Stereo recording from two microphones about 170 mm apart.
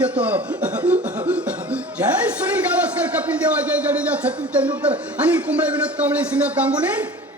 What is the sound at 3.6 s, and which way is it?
A man's voice, 10° right (ahead or behind).